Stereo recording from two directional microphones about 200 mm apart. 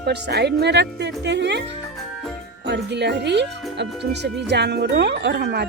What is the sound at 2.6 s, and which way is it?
Speech, 55° right (ahead or behind).